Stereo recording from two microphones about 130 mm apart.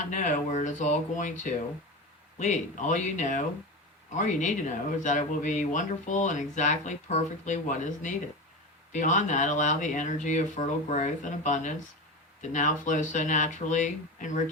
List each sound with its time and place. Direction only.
0.0 s speech: 75° left (ahead or behind)